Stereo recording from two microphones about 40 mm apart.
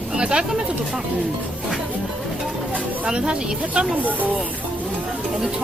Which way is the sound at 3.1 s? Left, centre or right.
Right.